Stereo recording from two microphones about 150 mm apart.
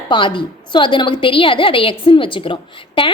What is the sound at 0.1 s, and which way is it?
A woman's voice, 35° left (ahead or behind).